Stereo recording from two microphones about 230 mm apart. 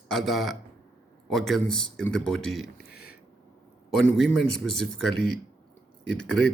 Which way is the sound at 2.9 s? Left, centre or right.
Left.